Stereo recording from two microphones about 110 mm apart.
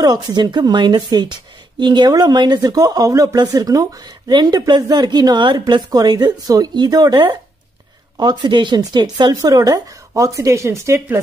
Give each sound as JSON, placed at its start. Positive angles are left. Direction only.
{"t": 0.0, "sound": "speech", "side_deg": -40}